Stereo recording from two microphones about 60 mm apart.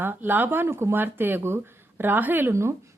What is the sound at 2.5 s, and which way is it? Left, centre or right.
Speech, right.